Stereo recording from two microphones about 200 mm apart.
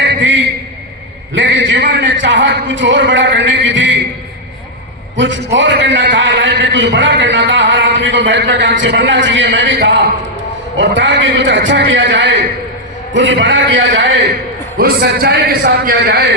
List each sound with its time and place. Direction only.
0.1 s a sound: 65° right (ahead or behind)
1.3 s a man's voice: 65° right (ahead or behind)
5.1 s a man's voice: 65° right (ahead or behind)
14.8 s a man's voice: 55° right (ahead or behind)